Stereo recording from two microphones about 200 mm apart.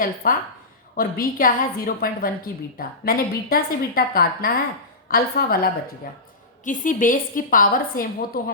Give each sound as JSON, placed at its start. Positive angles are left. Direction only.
{"t": 0.0, "sound": "a woman's voice", "side_deg": 45}